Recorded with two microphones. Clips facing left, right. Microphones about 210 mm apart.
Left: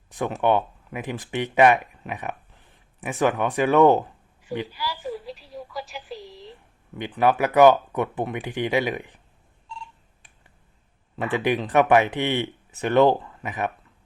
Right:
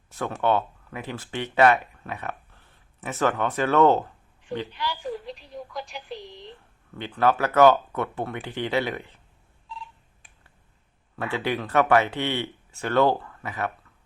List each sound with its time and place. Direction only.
0.1 s a sound: 15° left (ahead or behind)
0.4 s speech: 15° left (ahead or behind)
6.9 s speech: 15° left (ahead or behind)
9.6 s telephone: centre (ahead or behind)
11.2 s speech: 15° left (ahead or behind)